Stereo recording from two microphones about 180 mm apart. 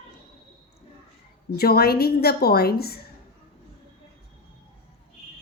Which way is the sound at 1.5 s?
60° left (ahead or behind).